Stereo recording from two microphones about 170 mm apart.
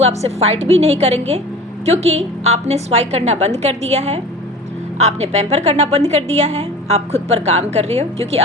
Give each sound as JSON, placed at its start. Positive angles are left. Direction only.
{"t": 0.0, "sound": "a woman's voice", "side_deg": -40}